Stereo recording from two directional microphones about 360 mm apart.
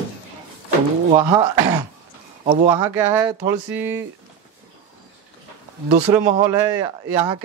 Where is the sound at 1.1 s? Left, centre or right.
Centre.